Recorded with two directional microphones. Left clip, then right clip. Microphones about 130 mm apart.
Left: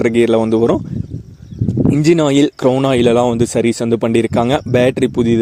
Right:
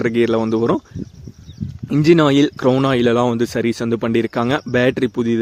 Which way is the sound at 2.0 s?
35° left (ahead or behind).